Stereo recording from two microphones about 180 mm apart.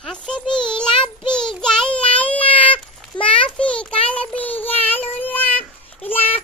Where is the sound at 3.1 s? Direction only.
30° left (ahead or behind).